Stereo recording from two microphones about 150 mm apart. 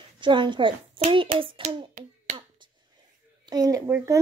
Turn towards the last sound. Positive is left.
turn(degrees=-20)  # may be behind; listen again after turning